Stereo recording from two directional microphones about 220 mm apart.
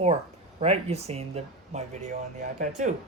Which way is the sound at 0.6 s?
30° right (ahead or behind).